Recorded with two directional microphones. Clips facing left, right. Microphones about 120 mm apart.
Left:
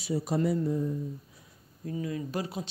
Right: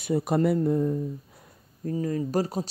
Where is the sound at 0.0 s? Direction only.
60° right (ahead or behind).